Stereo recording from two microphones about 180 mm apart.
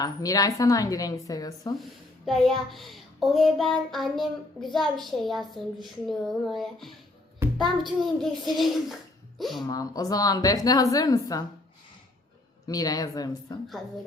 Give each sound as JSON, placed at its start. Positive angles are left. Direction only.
{"t": 0.0, "sound": "a woman's voice", "side_deg": 20}
{"t": 2.2, "sound": "child singing", "side_deg": 0}
{"t": 8.0, "sound": "child singing", "side_deg": 0}
{"t": 9.6, "sound": "a woman's voice", "side_deg": 20}
{"t": 12.6, "sound": "a woman's voice", "side_deg": 20}